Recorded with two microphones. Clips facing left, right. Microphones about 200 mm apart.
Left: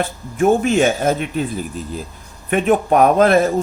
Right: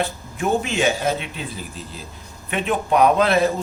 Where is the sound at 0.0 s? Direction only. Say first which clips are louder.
Left 7 dB; 50° left (ahead or behind).